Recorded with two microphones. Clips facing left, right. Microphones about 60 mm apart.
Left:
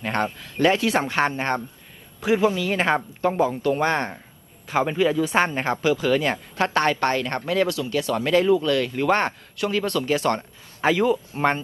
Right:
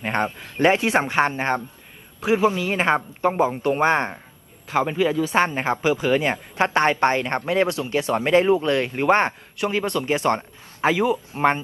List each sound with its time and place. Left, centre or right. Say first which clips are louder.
0.0 s speech: right 1 dB; right
4.9 s speech: even; centre